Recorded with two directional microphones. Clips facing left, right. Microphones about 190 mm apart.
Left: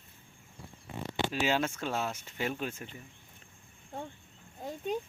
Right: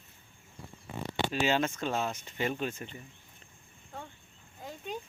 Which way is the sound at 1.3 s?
5° left (ahead or behind).